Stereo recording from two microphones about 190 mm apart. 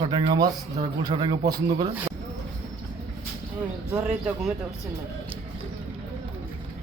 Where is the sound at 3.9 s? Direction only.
5° right (ahead or behind).